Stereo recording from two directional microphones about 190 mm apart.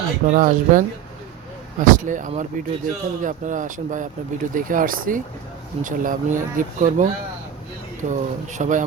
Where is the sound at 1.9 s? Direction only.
45° right (ahead or behind).